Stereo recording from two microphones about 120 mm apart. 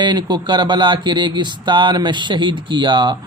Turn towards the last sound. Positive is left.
turn(degrees=-40)  # may be behind; listen again after turning